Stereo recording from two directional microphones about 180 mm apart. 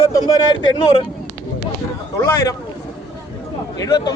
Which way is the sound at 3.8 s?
20° left (ahead or behind).